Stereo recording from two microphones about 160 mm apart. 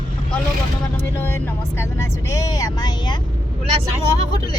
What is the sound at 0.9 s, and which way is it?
Vehicle, 15° left (ahead or behind).